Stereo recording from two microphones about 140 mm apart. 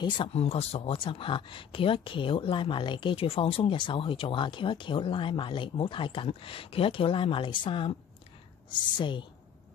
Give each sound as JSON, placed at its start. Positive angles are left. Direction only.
{"t": 0.3, "sound": "speech", "side_deg": 50}